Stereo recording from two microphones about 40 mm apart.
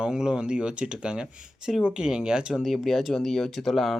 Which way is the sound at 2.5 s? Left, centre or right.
Centre.